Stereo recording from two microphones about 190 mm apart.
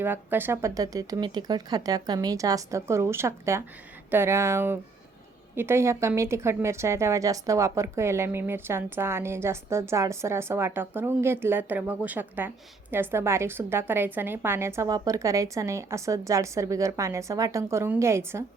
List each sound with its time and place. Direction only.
0.0 s a woman's voice: 10° right (ahead or behind)